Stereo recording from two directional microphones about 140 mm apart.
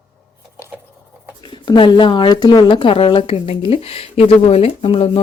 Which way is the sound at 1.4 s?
35° left (ahead or behind).